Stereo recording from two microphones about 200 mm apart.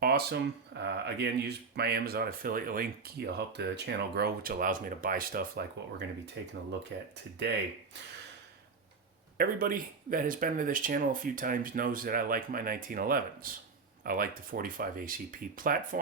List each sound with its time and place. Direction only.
0.0 s speech: 50° right (ahead or behind)
3.3 s speech: 55° right (ahead or behind)
9.4 s speech: 45° right (ahead or behind)